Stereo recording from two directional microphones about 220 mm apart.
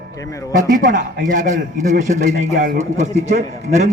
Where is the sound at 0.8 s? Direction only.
35° right (ahead or behind).